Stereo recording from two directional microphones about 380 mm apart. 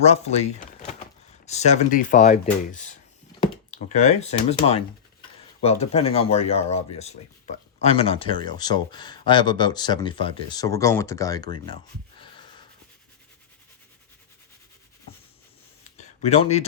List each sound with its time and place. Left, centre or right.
0.0 s speech: centre
16.0 s speech: centre